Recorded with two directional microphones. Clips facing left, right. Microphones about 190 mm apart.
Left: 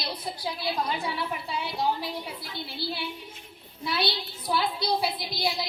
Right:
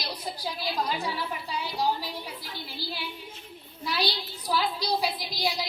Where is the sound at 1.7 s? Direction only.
25° left (ahead or behind).